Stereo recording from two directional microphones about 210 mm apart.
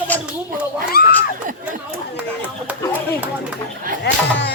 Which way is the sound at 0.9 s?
45° left (ahead or behind).